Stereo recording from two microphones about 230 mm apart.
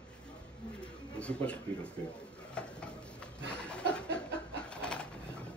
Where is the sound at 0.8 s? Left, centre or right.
Centre.